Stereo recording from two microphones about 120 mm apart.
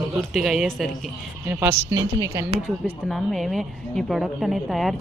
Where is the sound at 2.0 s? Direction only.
30° right (ahead or behind).